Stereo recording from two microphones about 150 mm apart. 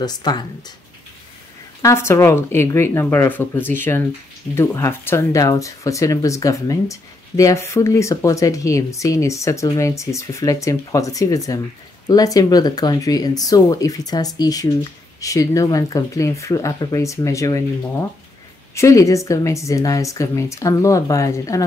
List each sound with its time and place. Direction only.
0.0 s speech: 30° left (ahead or behind)
1.8 s speech: 20° left (ahead or behind)